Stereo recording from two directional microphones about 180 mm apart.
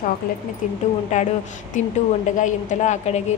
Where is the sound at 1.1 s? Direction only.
40° left (ahead or behind).